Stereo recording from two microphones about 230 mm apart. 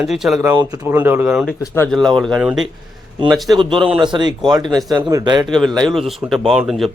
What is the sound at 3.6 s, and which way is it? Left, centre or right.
Speech, right.